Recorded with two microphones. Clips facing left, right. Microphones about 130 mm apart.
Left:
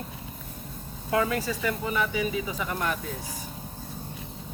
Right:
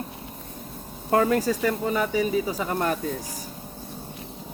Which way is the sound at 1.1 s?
45° right (ahead or behind).